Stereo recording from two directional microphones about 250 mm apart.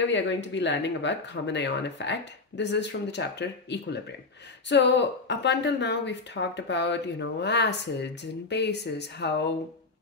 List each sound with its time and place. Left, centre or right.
0.0 s speech: left